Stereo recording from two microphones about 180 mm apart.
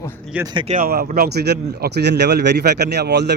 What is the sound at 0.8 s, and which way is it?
Speech, 60° right (ahead or behind).